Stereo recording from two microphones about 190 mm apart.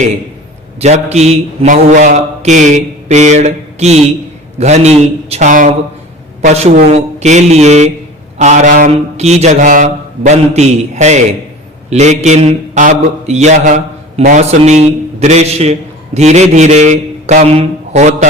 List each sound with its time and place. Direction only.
0.8 s a man's voice: 35° right (ahead or behind)